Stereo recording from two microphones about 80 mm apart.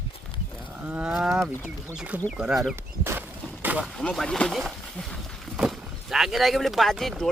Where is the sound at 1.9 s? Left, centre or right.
Centre.